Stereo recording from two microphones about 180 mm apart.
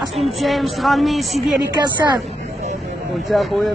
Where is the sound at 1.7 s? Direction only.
25° right (ahead or behind).